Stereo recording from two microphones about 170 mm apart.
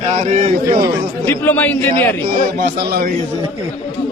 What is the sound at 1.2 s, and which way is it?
Speech, 10° left (ahead or behind).